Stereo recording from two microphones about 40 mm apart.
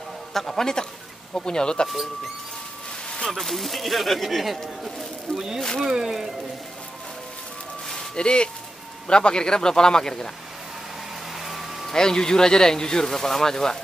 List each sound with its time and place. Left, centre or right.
0.3 s speech: centre
3.3 s speech: centre
5.3 s speech: left
5.8 s speech: centre
8.2 s speech: left
11.4 s a sound: centre
11.9 s speech: centre